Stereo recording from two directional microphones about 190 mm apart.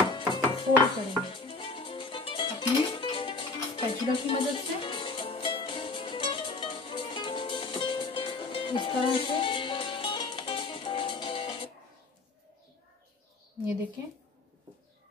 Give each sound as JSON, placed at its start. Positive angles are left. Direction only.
{"t": 0.1, "sound": "music", "side_deg": 25}